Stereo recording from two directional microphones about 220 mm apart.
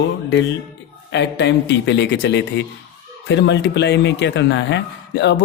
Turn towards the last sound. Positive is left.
turn(degrees=55)  # may be behind; listen again after turning